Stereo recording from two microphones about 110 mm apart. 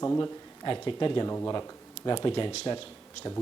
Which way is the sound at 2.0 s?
40° left (ahead or behind).